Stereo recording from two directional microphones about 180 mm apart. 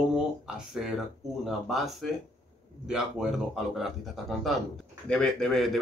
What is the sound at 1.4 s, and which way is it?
A man's voice, centre (ahead or behind).